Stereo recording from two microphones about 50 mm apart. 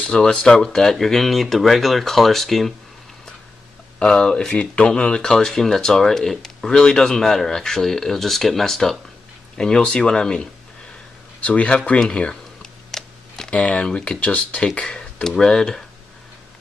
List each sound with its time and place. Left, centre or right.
0.0 s speech: centre
4.0 s speech: centre
9.6 s speech: centre
12.9 s computer keyboard: centre
13.5 s speech: centre